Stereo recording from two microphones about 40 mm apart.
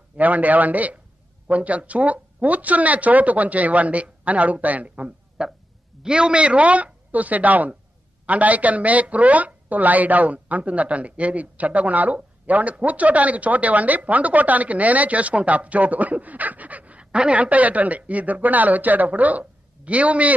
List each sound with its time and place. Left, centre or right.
0.2 s speech: right